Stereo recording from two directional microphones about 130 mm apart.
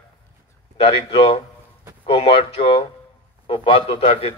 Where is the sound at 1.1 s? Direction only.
45° left (ahead or behind).